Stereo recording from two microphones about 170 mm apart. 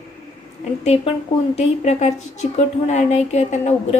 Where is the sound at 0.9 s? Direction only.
40° left (ahead or behind).